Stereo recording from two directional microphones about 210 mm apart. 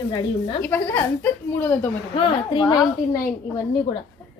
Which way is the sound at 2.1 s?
25° left (ahead or behind).